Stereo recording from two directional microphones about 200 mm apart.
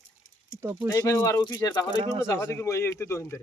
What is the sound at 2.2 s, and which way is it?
Speech, 15° left (ahead or behind).